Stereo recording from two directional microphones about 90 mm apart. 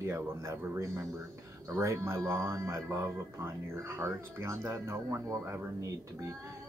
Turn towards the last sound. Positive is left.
turn(degrees=-35)  # may be behind; listen again after turning